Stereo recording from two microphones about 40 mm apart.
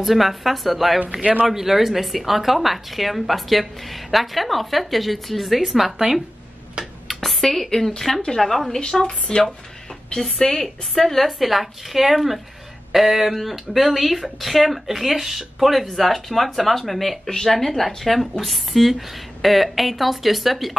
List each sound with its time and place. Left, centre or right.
0.0 s a woman's voice: centre
7.2 s a woman's voice: centre
8.7 s a woman's voice: centre